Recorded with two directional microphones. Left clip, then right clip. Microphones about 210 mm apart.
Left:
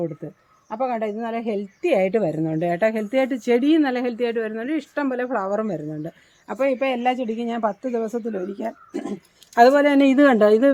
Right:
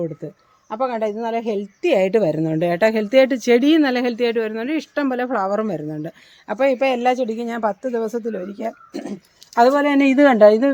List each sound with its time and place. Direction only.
0.2 s a woman's voice: 40° right (ahead or behind); by 9.1 s 20° right (ahead or behind)
9.6 s speech: 5° right (ahead or behind)